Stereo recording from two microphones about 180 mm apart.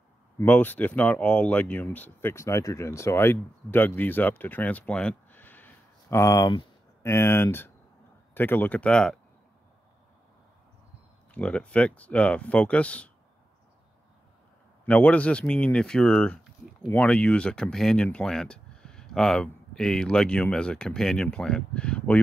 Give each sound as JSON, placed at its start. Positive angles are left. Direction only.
{"t": 0.4, "sound": "speech", "side_deg": 10}
{"t": 11.3, "sound": "speech", "side_deg": 5}
{"t": 14.9, "sound": "speech", "side_deg": 5}